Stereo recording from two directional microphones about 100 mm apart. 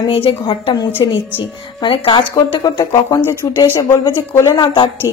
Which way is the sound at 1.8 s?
60° left (ahead or behind).